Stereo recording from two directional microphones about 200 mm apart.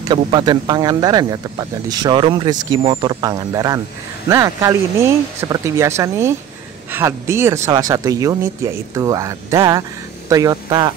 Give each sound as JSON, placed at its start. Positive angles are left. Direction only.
{"t": 0.1, "sound": "speech", "side_deg": -20}